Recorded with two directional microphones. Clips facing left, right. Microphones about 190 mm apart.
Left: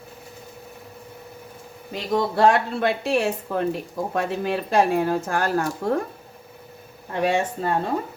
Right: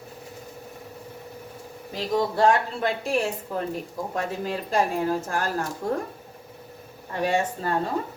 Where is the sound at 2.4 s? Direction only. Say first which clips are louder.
Left 4 dB; 70° left (ahead or behind).